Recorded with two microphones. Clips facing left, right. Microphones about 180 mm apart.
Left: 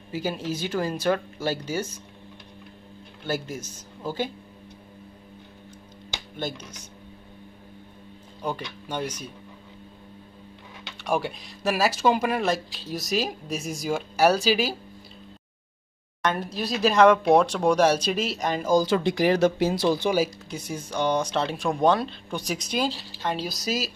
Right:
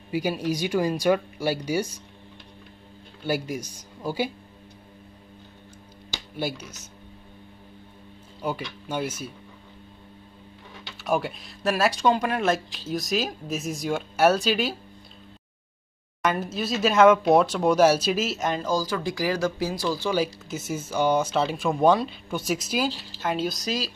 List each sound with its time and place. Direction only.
0.1 s speech: 15° right (ahead or behind)
3.3 s speech: 10° right (ahead or behind)
6.3 s speech: 10° right (ahead or behind)
8.4 s speech: 5° right (ahead or behind)
11.1 s speech: centre (ahead or behind)
16.2 s speech: 5° right (ahead or behind)
18.9 s speech: 25° left (ahead or behind)
20.4 s speech: 5° right (ahead or behind)